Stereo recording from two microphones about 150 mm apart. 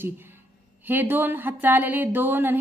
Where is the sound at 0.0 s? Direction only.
15° right (ahead or behind).